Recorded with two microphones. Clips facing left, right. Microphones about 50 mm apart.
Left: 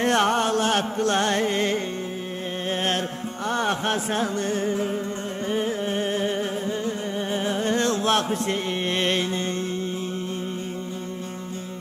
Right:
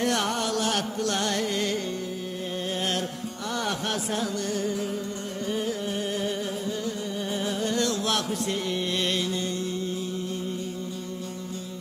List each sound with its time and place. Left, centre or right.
0.0 s music: left